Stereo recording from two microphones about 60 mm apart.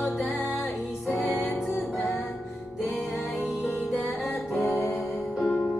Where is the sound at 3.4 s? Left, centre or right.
Left.